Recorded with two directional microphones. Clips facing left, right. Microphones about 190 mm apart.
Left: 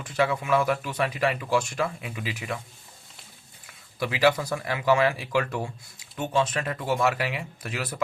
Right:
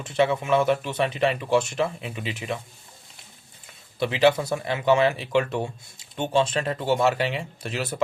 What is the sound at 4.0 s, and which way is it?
Speech, 25° right (ahead or behind).